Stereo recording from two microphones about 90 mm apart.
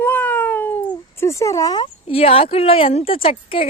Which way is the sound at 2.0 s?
90° left.